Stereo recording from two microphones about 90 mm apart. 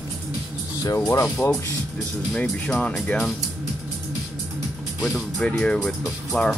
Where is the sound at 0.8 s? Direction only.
35° left (ahead or behind).